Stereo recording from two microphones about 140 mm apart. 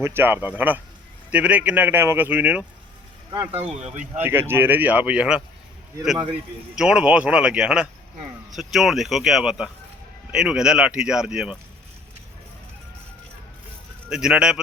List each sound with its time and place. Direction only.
0.0 s speech: 15° right (ahead or behind)
3.3 s speech: 35° right (ahead or behind)
3.8 s speech: 55° right (ahead or behind)
4.2 s speech: 15° right (ahead or behind)
6.7 s speech: 5° right (ahead or behind)
14.1 s speech: 5° right (ahead or behind)